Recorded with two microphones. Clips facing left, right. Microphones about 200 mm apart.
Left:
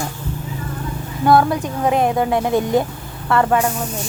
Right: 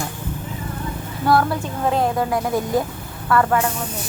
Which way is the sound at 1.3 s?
20° left (ahead or behind).